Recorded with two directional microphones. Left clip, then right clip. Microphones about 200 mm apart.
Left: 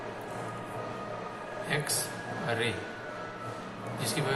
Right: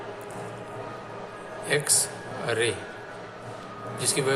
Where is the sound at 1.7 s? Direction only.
45° right (ahead or behind).